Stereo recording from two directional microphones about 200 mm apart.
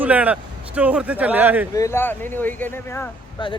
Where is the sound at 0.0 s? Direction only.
5° right (ahead or behind).